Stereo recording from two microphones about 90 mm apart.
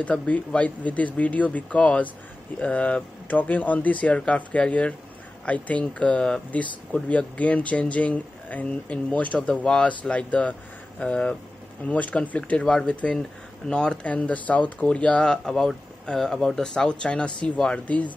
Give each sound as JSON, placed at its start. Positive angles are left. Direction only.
{"t": 0.0, "sound": "speech", "side_deg": 15}